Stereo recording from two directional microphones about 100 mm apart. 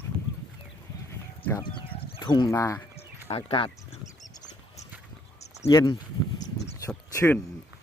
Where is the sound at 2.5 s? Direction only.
30° left (ahead or behind).